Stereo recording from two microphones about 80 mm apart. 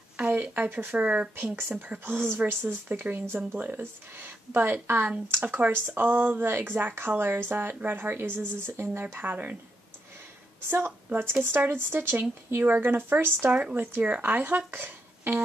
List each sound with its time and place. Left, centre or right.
0.2 s a woman's voice: right
1.3 s speech: right
11.4 s speech: right
14.7 s music: right